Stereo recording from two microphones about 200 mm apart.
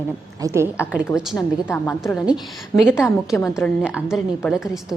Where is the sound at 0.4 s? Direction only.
15° right (ahead or behind).